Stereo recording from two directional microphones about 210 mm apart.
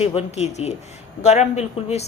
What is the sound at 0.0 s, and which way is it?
Speech, 30° left (ahead or behind).